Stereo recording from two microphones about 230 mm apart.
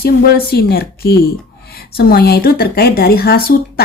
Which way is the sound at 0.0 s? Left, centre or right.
Left.